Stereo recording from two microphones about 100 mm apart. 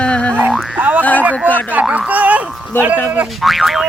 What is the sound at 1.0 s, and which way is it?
Speech, 15° left (ahead or behind).